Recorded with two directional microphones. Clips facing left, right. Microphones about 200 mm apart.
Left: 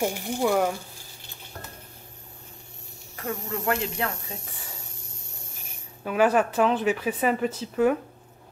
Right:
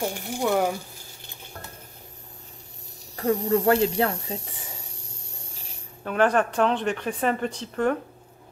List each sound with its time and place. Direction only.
0.4 s speech: centre (ahead or behind)
3.2 s speech: 35° right (ahead or behind)
6.0 s speech: 5° left (ahead or behind)